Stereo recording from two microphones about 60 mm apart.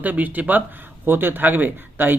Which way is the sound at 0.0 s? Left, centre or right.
Right.